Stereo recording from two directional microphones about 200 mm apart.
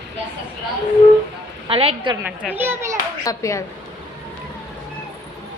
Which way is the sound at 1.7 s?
30° right (ahead or behind).